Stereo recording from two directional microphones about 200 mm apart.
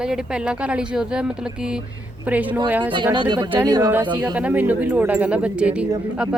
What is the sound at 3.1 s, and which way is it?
A woman's voice, 25° right (ahead or behind).